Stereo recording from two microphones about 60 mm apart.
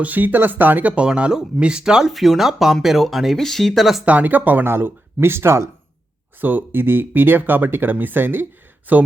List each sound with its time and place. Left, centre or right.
0.0 s speech: right
1.0 s speech: centre
2.1 s speech: centre
4.0 s speech: right
6.4 s speech: right